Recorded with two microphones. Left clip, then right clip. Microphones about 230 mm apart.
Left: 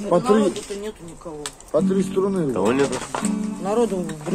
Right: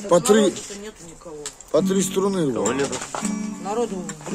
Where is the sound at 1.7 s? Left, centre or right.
Right.